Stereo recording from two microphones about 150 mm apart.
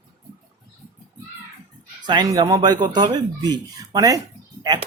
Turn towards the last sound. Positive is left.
turn(degrees=-30)  # may be behind; listen again after turning